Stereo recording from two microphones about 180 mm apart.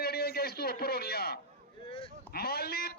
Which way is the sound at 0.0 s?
60° left (ahead or behind).